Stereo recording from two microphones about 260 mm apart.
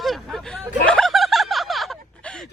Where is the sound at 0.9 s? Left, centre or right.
Centre.